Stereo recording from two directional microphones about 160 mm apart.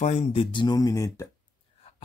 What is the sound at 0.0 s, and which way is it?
Speech, 40° left (ahead or behind).